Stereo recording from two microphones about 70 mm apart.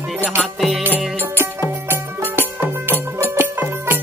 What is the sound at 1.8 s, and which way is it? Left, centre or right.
Music, right.